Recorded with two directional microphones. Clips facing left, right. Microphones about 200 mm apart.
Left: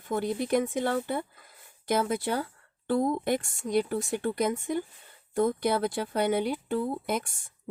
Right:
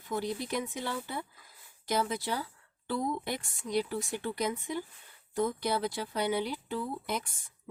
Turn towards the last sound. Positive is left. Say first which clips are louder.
# left 6 dB
turn(degrees=50)  # may be behind; listen again after turning